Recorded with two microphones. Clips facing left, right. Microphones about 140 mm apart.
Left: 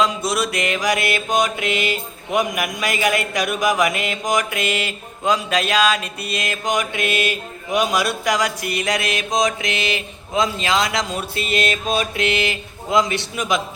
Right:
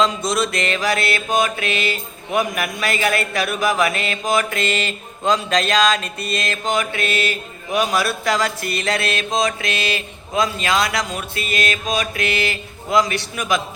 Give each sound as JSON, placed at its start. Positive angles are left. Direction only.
{"t": 0.0, "sound": "mantra", "side_deg": 10}